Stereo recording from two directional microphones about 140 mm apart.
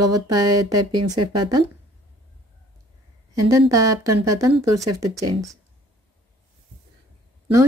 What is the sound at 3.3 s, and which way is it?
Speech, 25° right (ahead or behind).